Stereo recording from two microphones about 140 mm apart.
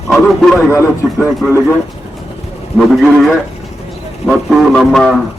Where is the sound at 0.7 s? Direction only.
20° left (ahead or behind).